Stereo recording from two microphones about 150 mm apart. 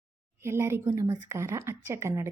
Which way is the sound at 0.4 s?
15° right (ahead or behind).